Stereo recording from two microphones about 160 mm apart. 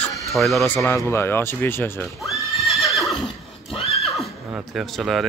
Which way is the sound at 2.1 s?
Centre (ahead or behind).